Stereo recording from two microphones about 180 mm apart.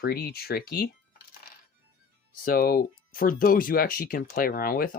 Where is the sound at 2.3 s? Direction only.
55° left (ahead or behind).